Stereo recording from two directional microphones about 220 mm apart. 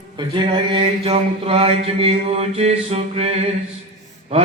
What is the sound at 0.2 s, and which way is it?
Mantra, 20° right (ahead or behind).